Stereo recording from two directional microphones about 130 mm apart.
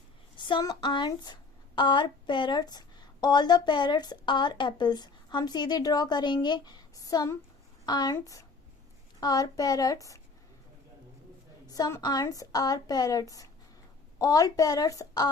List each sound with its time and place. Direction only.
0.3 s a woman's voice: 35° left (ahead or behind)
11.6 s a woman's voice: 30° left (ahead or behind)